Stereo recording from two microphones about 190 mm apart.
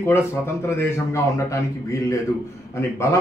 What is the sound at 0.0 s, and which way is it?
A man's voice, 15° left (ahead or behind).